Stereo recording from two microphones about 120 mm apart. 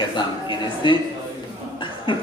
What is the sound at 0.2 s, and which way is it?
A man's voice, 40° left (ahead or behind).